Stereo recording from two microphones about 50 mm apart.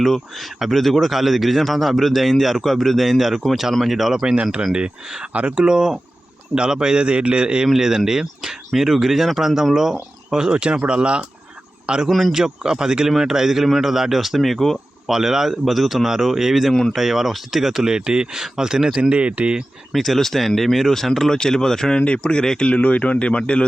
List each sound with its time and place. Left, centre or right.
0.0 s speech: centre
4.2 s speech: centre
5.3 s speech: right; by 14.8 s centre
15.0 s speech: centre
19.9 s speech: centre
21.9 s speech: left
22.7 s speech: left